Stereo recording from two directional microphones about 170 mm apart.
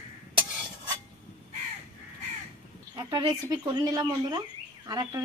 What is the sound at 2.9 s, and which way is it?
Speech, 20° right (ahead or behind).